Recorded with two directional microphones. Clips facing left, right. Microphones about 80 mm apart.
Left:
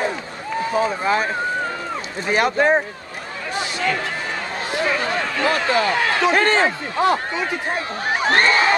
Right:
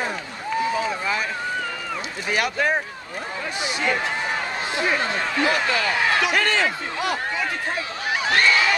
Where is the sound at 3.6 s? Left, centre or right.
Centre.